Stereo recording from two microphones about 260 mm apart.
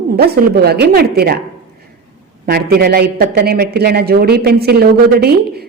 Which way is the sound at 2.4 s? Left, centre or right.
Right.